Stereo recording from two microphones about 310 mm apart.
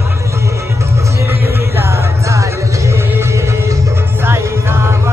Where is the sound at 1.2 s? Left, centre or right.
Centre.